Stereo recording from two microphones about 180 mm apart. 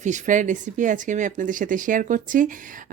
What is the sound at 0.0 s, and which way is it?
Speech, 45° right (ahead or behind).